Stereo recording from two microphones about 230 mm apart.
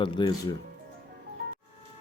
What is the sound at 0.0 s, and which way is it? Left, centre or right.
Speech, centre.